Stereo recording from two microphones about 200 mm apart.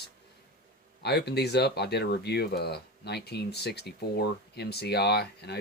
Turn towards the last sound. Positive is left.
turn(degrees=55)  # may be behind; listen again after turning